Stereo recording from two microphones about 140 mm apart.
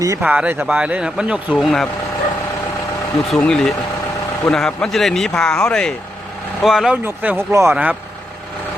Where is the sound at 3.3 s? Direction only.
5° left (ahead or behind); by 8.0 s 10° right (ahead or behind).